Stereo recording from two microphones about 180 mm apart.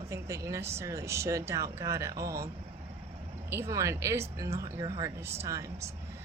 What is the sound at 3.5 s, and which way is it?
A woman's voice, 15° right (ahead or behind).